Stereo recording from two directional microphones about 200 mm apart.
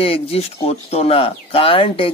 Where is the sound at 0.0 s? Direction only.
30° left (ahead or behind).